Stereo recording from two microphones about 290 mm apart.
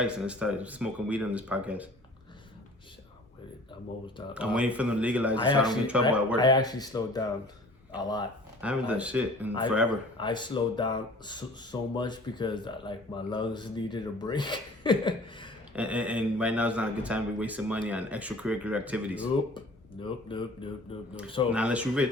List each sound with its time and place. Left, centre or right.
0.0 s speech: centre
4.4 s speech: centre
6.3 s speech: centre
8.6 s speech: centre
10.2 s speech: centre
15.7 s speech: centre
20.0 s speech: centre
21.5 s speech: centre